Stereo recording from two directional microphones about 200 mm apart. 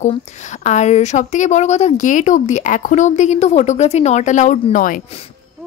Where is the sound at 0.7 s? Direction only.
35° left (ahead or behind).